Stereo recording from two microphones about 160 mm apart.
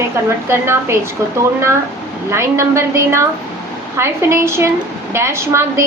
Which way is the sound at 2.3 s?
15° right (ahead or behind).